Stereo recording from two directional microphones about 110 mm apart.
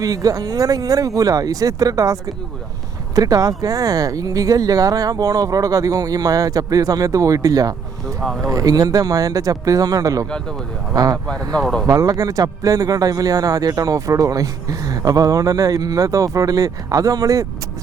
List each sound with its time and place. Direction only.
0.0 s speech: 35° right (ahead or behind)
8.2 s speech: 5° left (ahead or behind)
8.4 s speech: 35° right (ahead or behind)
11.5 s speech: 5° left (ahead or behind)
11.9 s speech: 30° right (ahead or behind)